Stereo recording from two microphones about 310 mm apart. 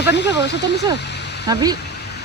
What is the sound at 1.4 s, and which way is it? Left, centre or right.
Speech, centre.